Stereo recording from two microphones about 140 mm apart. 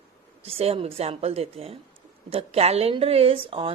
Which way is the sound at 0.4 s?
45° right (ahead or behind).